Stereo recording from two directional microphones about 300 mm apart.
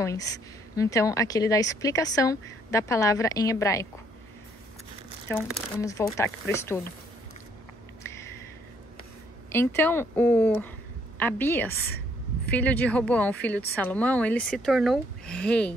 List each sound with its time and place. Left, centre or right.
0.0 s a woman's voice: centre
5.3 s a woman's voice: centre
9.5 s a woman's voice: centre